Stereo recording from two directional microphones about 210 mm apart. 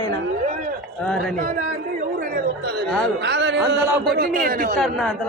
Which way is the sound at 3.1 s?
55° right (ahead or behind).